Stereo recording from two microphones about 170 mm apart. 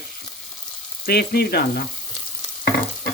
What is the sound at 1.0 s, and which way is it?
Speech, 65° left (ahead or behind).